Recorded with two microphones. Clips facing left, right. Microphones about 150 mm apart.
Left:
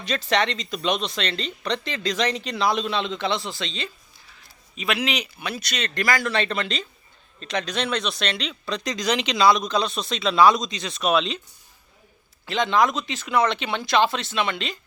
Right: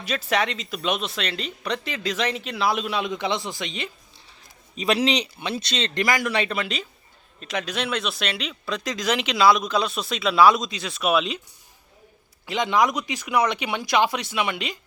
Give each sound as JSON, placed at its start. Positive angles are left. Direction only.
{"t": 0.0, "sound": "speech", "side_deg": -5}
{"t": 4.3, "sound": "speech", "side_deg": -35}
{"t": 12.5, "sound": "speech", "side_deg": -15}